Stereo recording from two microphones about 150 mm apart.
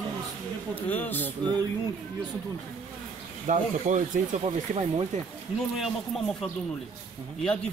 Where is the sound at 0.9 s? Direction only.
10° left (ahead or behind).